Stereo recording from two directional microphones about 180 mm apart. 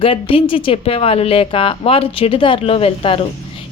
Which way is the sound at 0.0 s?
30° left (ahead or behind).